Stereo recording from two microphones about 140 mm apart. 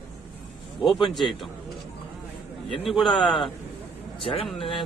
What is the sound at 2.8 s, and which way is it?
Speech, centre (ahead or behind).